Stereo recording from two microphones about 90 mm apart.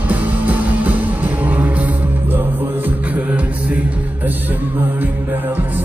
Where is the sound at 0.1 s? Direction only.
15° right (ahead or behind).